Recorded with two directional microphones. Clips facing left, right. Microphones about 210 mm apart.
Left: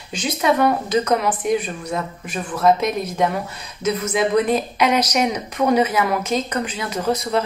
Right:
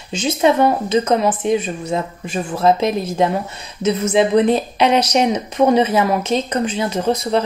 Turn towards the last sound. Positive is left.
turn(degrees=-25)  # may be behind; listen again after turning